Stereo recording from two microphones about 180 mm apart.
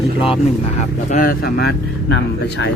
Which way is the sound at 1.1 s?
50° left (ahead or behind).